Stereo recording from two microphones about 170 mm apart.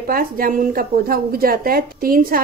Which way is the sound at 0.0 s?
55° right (ahead or behind).